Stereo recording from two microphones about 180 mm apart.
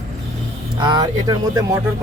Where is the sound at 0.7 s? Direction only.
25° right (ahead or behind).